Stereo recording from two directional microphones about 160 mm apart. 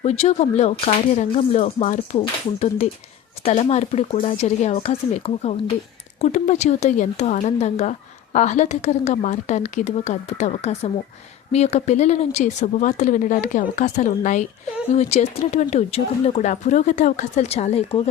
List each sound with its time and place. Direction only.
0.0 s speech: 40° left (ahead or behind)